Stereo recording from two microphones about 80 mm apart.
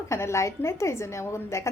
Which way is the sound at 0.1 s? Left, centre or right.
Left.